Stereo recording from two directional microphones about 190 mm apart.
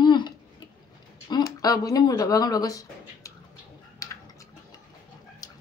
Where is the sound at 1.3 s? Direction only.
20° left (ahead or behind).